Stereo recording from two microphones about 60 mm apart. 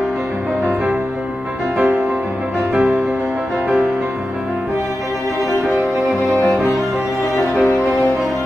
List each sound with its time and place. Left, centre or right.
3.6 s music: right
5.7 s music: centre